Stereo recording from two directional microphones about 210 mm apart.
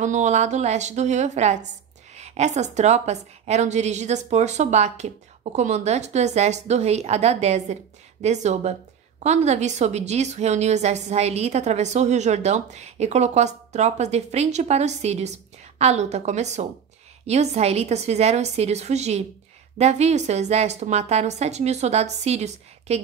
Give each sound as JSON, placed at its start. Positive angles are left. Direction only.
{"t": 0.0, "sound": "a woman's voice", "side_deg": -35}